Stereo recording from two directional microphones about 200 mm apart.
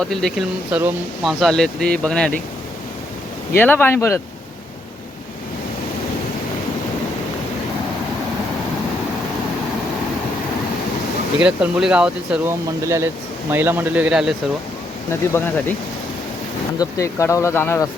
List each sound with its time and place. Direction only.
0.0 s speech: centre (ahead or behind)
3.5 s speech: 10° left (ahead or behind)
11.3 s a man's voice: 5° right (ahead or behind)
15.1 s speech: 10° left (ahead or behind)
16.7 s speech: 15° left (ahead or behind)